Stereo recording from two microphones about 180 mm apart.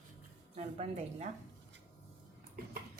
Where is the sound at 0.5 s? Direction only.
40° right (ahead or behind).